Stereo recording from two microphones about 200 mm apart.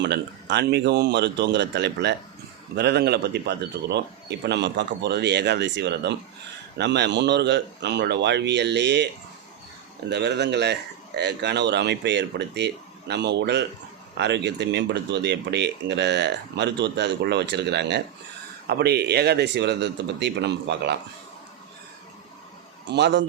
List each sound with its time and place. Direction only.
0.0 s speech: 60° right (ahead or behind)
10.1 s speech: 60° right (ahead or behind)
22.9 s speech: 60° right (ahead or behind)